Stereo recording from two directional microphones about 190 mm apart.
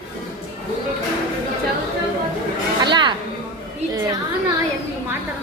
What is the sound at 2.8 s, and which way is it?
Speech, 25° right (ahead or behind).